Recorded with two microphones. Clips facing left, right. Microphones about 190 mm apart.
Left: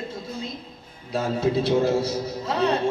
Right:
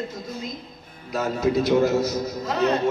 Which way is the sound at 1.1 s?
30° left (ahead or behind).